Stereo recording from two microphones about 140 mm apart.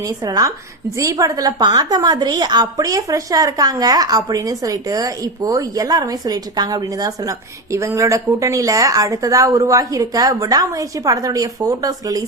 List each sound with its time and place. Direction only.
0.0 s a woman's voice: 25° right (ahead or behind)